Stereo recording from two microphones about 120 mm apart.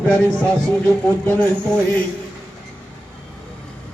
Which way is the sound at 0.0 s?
10° left (ahead or behind).